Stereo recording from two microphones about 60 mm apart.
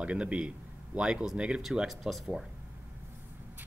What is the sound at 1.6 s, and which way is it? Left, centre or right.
Speech, centre.